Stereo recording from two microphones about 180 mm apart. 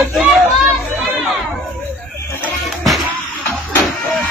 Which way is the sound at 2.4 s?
Centre (ahead or behind).